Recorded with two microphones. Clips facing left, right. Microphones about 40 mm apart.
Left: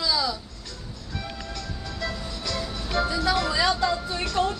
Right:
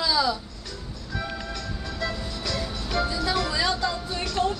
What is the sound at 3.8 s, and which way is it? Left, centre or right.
Music, centre.